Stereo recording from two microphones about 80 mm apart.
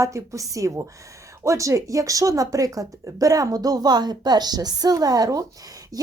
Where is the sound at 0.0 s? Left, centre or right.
Right.